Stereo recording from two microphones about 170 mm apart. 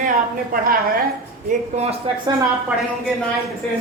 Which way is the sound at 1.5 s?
40° right (ahead or behind).